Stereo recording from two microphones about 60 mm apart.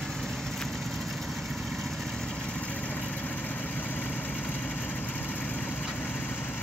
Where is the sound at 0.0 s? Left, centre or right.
Centre.